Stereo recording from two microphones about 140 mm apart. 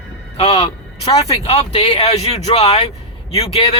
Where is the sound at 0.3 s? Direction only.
40° left (ahead or behind).